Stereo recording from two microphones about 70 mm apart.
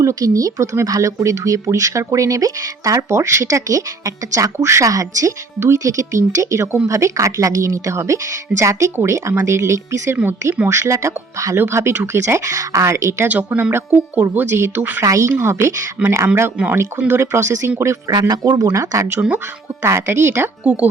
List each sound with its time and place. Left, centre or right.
0.0 s speech: right
4.5 s speech: right
5.5 s speech: right
11.5 s speech: right
13.2 s speech: right
18.1 s speech: right
19.8 s speech: right